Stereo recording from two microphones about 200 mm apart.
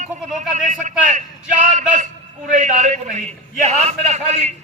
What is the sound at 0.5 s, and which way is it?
Speech, 40° right (ahead or behind).